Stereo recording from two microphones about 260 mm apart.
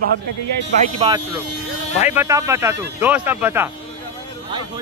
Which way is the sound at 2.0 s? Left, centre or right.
Centre.